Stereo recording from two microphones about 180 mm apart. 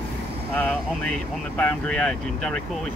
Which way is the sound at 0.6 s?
10° left (ahead or behind).